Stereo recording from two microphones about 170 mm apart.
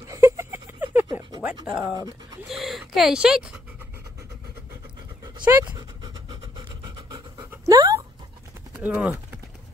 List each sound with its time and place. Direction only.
0.1 s a sound: 15° right (ahead or behind)
1.7 s speech: 5° right (ahead or behind)
2.0 s speech: 20° right (ahead or behind)
2.4 s speech: centre (ahead or behind)
5.4 s speech: 15° right (ahead or behind)
7.6 s dog: 20° right (ahead or behind)
8.7 s typing: 10° right (ahead or behind)